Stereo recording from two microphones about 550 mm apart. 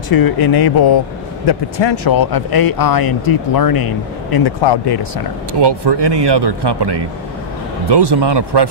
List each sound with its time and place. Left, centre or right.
0.1 s speech: left
5.5 s speech: right